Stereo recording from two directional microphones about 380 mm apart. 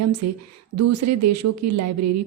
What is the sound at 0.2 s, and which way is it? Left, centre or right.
A woman's voice, right.